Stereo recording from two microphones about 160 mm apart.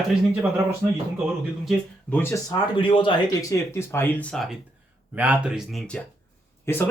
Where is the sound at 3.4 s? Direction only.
20° left (ahead or behind).